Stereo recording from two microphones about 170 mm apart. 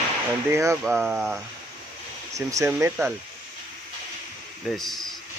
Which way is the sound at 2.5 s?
20° right (ahead or behind).